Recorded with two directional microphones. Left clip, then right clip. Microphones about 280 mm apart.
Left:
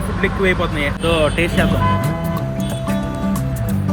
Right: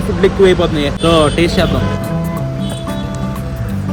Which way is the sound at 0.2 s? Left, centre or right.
Centre.